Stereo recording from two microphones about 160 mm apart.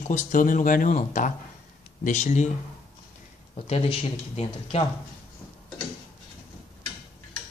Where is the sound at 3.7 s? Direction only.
40° left (ahead or behind).